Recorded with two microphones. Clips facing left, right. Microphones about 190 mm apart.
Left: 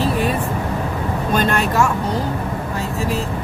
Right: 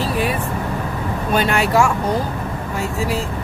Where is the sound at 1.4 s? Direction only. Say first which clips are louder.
Right 2 dB; 10° right (ahead or behind).